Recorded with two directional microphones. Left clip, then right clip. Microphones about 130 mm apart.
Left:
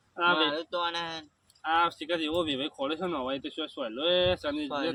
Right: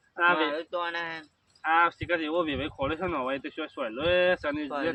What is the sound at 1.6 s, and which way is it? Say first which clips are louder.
Speech: right 3 dB; 20° left (ahead or behind).